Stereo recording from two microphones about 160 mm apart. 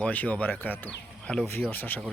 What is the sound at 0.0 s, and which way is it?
Speech, 10° left (ahead or behind).